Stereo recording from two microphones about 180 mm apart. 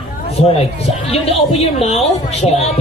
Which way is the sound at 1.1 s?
35° left (ahead or behind).